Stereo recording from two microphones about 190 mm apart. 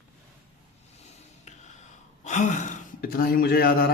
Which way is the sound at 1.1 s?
35° left (ahead or behind).